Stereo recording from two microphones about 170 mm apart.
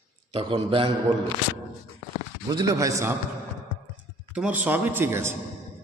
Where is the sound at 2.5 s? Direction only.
20° right (ahead or behind).